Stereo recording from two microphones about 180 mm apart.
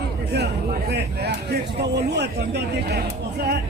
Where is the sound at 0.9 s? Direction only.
65° right (ahead or behind).